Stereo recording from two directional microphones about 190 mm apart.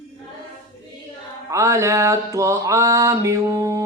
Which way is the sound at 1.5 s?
15° right (ahead or behind).